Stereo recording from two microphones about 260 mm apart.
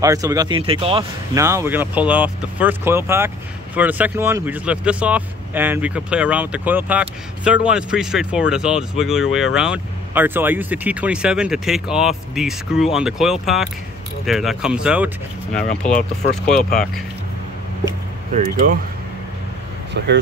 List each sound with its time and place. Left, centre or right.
0.0 s speech: centre
15.7 s speech: left
16.4 s speech: centre
18.3 s speech: right